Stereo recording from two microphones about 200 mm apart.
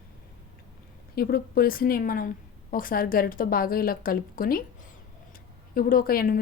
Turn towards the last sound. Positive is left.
turn(degrees=45)  # may be behind; listen again after turning